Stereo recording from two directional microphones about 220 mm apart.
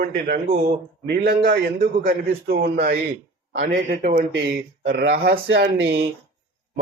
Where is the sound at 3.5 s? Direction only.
50° right (ahead or behind).